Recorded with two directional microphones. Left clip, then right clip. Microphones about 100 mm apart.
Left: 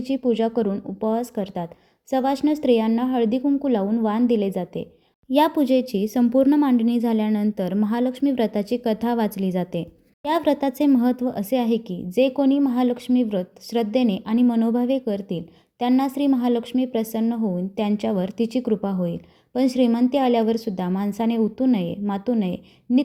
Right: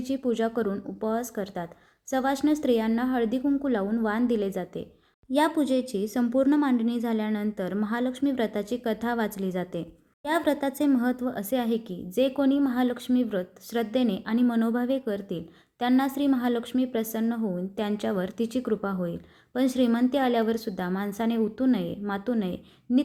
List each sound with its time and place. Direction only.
0.3 s a woman's voice: 25° left (ahead or behind)